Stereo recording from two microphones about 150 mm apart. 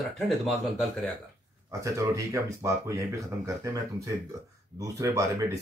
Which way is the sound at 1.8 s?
20° right (ahead or behind).